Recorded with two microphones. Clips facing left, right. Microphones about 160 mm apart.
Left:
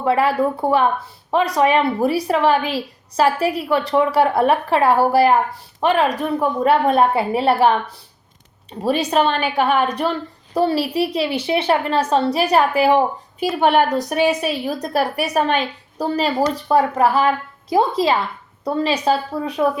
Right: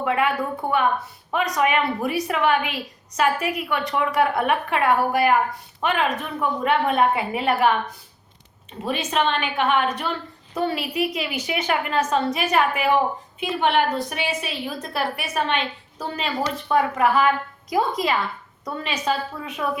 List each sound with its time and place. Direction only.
0.0 s a woman's voice: 35° left (ahead or behind)